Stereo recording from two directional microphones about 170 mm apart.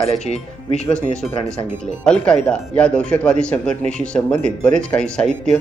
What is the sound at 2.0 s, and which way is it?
Speech, 5° left (ahead or behind).